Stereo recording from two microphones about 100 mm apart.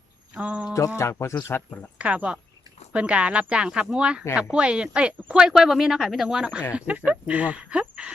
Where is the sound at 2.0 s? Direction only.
15° right (ahead or behind).